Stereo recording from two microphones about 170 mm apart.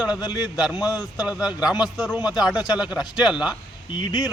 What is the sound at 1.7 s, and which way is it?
Speech, 25° left (ahead or behind).